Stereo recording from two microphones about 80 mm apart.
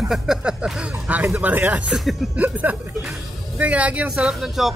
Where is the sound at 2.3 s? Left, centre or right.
Centre.